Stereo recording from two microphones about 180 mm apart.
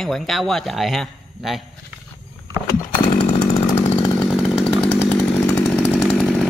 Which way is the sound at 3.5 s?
20° left (ahead or behind).